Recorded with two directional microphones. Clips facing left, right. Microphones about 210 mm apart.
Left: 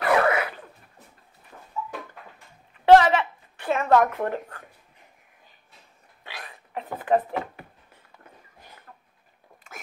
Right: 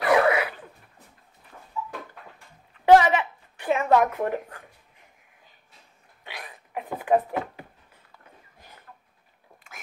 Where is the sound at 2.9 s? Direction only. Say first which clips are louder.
Left 1 dB; 15° right (ahead or behind).